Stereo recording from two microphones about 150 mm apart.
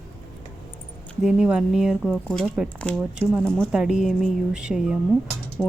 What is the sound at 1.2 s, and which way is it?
Speech, 5° right (ahead or behind).